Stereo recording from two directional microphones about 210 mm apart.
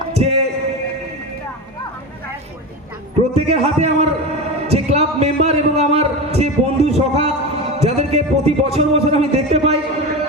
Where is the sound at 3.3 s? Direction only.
30° right (ahead or behind).